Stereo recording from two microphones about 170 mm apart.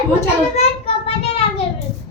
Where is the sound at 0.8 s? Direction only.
35° left (ahead or behind).